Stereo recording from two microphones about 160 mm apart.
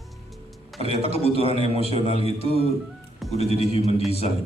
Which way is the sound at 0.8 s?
40° left (ahead or behind).